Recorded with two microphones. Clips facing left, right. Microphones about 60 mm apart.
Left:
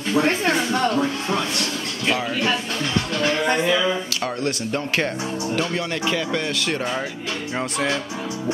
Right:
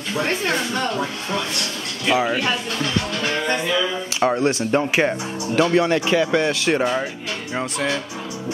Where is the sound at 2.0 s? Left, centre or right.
Right.